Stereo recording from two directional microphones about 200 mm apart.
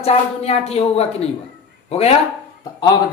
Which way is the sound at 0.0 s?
30° left (ahead or behind).